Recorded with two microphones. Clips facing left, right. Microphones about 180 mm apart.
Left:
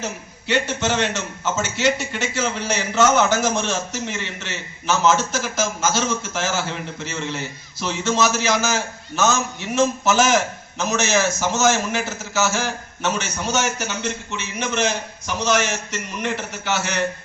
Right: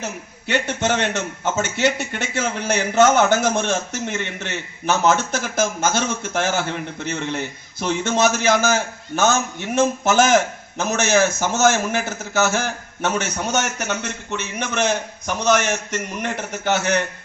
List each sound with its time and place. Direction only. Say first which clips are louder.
0.4 s a man's voice: even; 55° right (ahead or behind)